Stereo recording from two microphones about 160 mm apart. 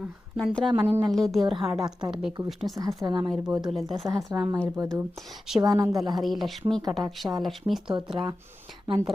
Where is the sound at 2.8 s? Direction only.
25° right (ahead or behind).